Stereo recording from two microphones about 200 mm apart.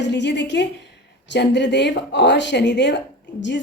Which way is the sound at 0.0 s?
60° left (ahead or behind).